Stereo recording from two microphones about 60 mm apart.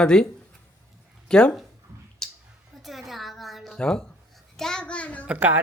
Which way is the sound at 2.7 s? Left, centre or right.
Centre.